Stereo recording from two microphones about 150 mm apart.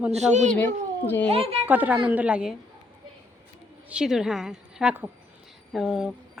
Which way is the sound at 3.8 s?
5° right (ahead or behind).